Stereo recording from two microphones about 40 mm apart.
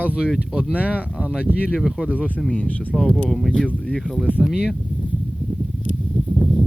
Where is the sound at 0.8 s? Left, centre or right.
Right.